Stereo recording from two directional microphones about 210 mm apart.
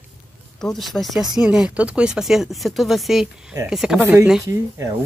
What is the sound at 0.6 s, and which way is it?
Speech, centre (ahead or behind).